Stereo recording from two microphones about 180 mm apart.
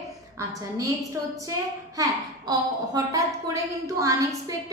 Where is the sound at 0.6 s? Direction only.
20° right (ahead or behind).